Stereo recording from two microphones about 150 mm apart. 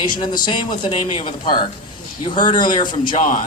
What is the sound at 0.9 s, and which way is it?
A man's voice, 40° left (ahead or behind).